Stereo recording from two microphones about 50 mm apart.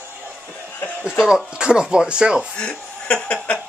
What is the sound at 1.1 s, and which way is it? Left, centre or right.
Speech, centre.